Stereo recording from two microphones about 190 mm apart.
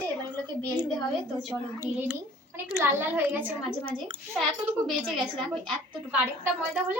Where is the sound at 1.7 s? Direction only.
10° right (ahead or behind).